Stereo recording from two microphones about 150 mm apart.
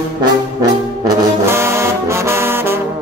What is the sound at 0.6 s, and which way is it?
Brass instrument, 20° right (ahead or behind).